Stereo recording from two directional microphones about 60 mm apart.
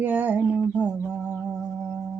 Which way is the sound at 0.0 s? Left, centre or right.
Right.